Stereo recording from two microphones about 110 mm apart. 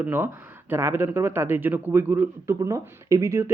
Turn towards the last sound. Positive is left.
turn(degrees=-25)  # may be behind; listen again after turning